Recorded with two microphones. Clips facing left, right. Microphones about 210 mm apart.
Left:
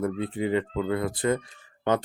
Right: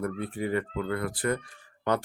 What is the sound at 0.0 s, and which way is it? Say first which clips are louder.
Speech: left 4 dB; 20° left (ahead or behind).